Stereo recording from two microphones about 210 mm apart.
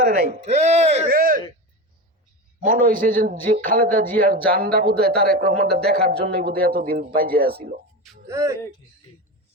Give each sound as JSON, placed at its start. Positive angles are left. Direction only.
{"t": 0.0, "sound": "a man's voice", "side_deg": -50}
{"t": 0.4, "sound": "speech", "side_deg": -35}
{"t": 2.6, "sound": "a man's voice", "side_deg": -40}
{"t": 8.3, "sound": "speech", "side_deg": -15}